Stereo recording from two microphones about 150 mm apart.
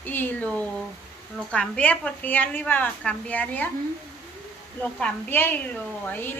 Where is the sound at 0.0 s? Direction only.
15° left (ahead or behind).